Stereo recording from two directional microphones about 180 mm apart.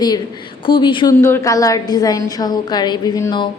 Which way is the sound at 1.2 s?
15° left (ahead or behind).